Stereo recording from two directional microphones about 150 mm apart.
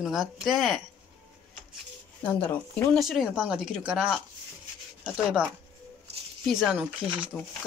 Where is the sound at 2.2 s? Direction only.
10° left (ahead or behind).